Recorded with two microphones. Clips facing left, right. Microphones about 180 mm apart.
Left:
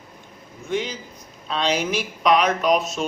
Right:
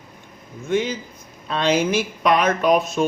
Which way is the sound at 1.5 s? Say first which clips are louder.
Right 4 dB; 55° right (ahead or behind).